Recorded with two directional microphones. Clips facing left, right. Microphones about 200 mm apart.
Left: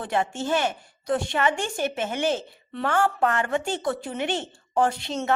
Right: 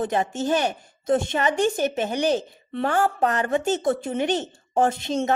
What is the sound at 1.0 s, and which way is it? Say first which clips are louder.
Speech: right 3 dB; 25° right (ahead or behind).